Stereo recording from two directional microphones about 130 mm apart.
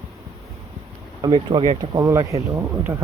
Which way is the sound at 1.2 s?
40° right (ahead or behind).